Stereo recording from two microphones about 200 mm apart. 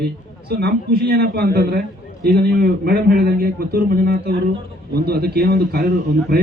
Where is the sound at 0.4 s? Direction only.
55° right (ahead or behind).